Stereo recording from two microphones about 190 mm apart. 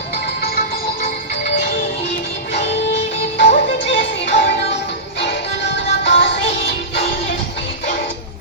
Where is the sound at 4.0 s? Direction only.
65° left (ahead or behind).